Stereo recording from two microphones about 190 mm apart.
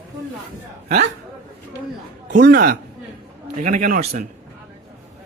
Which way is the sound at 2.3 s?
50° right (ahead or behind).